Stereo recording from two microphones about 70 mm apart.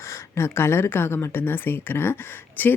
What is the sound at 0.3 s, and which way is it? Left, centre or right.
Speech, left.